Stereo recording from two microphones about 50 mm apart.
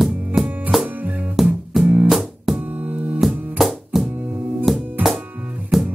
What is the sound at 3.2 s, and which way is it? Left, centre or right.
Music, centre.